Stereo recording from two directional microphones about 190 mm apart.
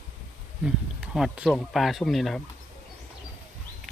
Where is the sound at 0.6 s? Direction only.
5° right (ahead or behind).